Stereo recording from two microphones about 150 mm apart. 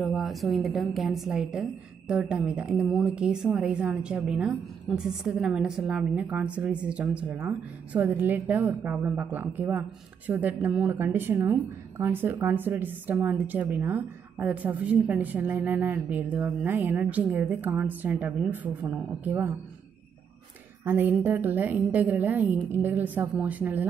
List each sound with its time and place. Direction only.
0.0 s a woman's voice: centre (ahead or behind)
20.8 s a woman's voice: 15° right (ahead or behind)